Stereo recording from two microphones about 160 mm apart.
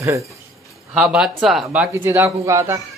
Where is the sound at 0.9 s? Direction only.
5° right (ahead or behind).